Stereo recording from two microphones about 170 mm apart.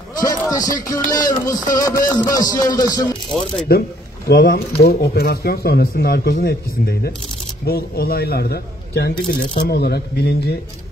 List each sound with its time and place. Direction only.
0.5 s speech: 20° left (ahead or behind)
3.7 s speech: 65° left (ahead or behind)
9.6 s speech: 75° left (ahead or behind)